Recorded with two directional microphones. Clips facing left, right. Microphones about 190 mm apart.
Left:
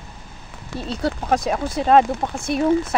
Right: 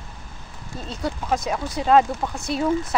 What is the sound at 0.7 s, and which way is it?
Speech, 70° left (ahead or behind).